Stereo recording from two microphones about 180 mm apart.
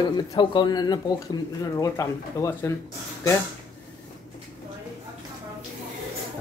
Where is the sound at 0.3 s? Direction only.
25° left (ahead or behind).